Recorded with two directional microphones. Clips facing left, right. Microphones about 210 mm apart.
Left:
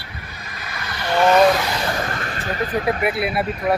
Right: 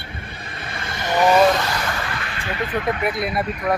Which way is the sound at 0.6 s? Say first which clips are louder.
Even; 25° right (ahead or behind).